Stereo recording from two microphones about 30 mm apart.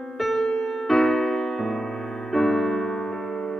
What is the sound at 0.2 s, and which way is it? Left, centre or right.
Music, centre.